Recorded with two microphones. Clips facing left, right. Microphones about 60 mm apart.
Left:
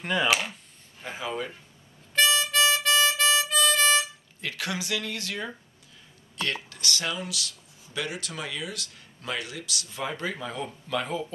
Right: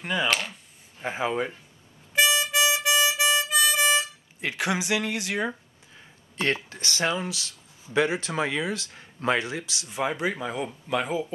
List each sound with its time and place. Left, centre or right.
0.0 s speech: centre
1.0 s speech: right
2.1 s harmonica: centre
4.4 s speech: right